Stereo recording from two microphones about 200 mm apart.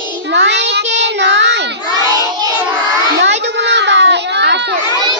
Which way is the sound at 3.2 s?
60° right (ahead or behind).